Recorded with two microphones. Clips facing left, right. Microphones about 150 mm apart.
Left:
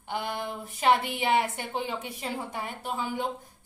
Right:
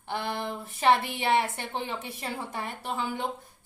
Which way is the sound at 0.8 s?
15° left (ahead or behind).